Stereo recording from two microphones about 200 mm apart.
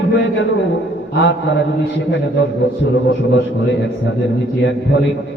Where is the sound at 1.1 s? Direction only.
65° left (ahead or behind).